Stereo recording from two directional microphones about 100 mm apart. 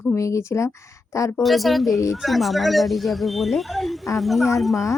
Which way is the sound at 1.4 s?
Centre (ahead or behind).